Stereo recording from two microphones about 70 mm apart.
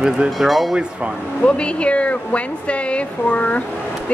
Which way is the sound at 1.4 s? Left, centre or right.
Centre.